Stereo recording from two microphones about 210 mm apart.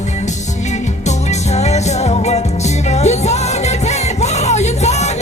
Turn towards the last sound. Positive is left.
turn(degrees=30)  # may be behind; listen again after turning